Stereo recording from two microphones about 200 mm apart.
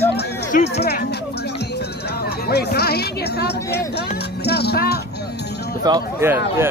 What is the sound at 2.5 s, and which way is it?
Speech, 55° left (ahead or behind).